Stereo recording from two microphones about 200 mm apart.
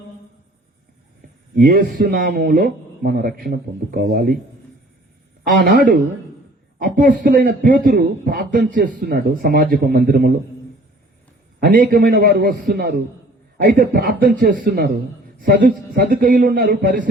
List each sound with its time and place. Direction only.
1.5 s a man's voice: 50° right (ahead or behind)
5.6 s a man's voice: 40° right (ahead or behind)
11.6 s a man's voice: 45° right (ahead or behind)